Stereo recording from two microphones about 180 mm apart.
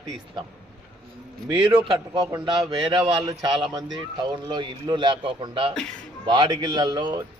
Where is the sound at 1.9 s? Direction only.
20° right (ahead or behind).